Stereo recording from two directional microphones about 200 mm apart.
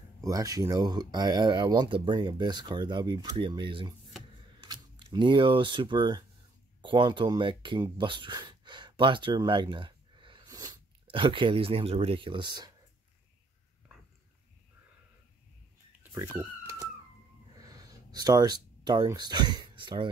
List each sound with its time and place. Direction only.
0.2 s speech: 15° right (ahead or behind)
16.0 s dog: 10° right (ahead or behind)
17.6 s a sound: 20° right (ahead or behind)